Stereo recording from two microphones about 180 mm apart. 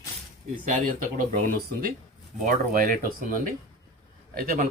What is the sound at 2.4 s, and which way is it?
Speech, 50° right (ahead or behind).